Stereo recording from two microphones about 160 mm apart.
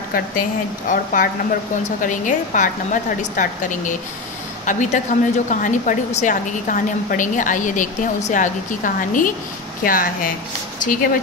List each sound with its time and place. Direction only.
0.1 s a woman's voice: 60° left (ahead or behind)